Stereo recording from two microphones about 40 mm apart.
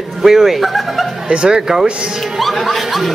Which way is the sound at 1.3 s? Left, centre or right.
Right.